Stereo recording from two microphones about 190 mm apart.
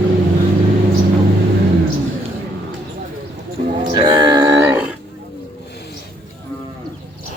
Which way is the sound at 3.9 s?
20° right (ahead or behind).